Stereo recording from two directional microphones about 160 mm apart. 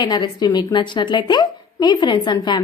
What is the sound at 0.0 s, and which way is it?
A woman's voice, 25° left (ahead or behind).